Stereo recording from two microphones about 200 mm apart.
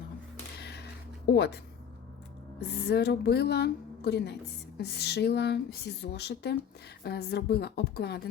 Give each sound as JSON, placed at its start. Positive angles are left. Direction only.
{"t": 0.6, "sound": "a sound", "side_deg": 55}
{"t": 1.3, "sound": "speech", "side_deg": 55}
{"t": 2.6, "sound": "speech", "side_deg": 55}